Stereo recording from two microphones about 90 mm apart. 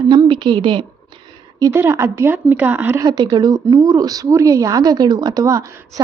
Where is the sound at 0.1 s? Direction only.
55° right (ahead or behind).